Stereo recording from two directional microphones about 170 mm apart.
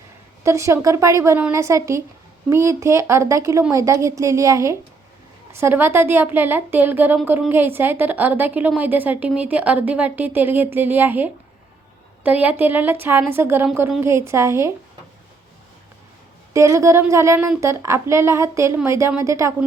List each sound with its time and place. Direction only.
0.4 s a woman's voice: 15° right (ahead or behind)
16.5 s a woman's voice: 15° right (ahead or behind)